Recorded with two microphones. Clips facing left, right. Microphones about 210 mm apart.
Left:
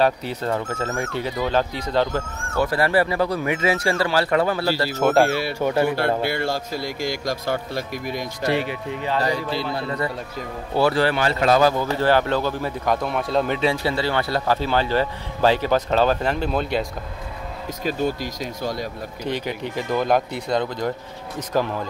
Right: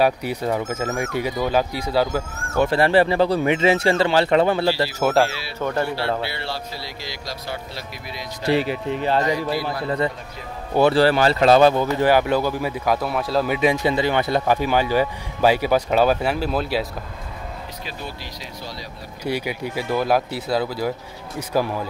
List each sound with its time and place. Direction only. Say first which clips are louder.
0.0 s speech: right 1 dB; 10° right (ahead or behind)
2.5 s speech: right 3 dB; 25° right (ahead or behind)
4.9 s speech: left 4 dB; 5° right (ahead or behind)
5.6 s speech: left 1 dB; 10° left (ahead or behind)
5.9 s a man's voice: left 3 dB; 50° left (ahead or behind)
8.5 s speech: right 4 dB; 35° right (ahead or behind)
9.2 s speech: right 1 dB; 25° left (ahead or behind)
11.0 s speech: right 4 dB; 35° right (ahead or behind); by 13.6 s 5° right (ahead or behind)
13.6 s speech: right 3 dB; 15° right (ahead or behind)
17.8 s a man's voice: left 14 dB; 45° left (ahead or behind)
19.2 s speech: right 2 dB; 10° right (ahead or behind)